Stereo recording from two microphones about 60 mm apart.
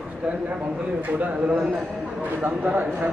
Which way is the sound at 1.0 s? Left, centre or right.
Right.